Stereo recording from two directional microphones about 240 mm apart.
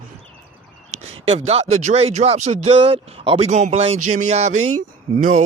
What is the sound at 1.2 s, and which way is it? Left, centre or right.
Speech, right.